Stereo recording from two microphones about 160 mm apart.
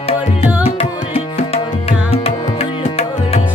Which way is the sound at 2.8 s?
40° left (ahead or behind).